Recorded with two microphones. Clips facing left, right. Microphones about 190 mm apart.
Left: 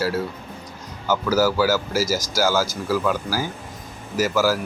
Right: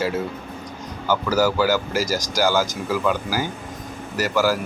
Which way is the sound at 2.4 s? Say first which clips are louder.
Right 2 dB; 5° left (ahead or behind).